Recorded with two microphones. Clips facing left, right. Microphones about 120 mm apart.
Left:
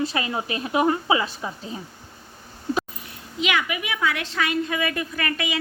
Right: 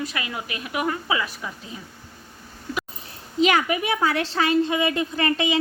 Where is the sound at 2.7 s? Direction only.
25° left (ahead or behind).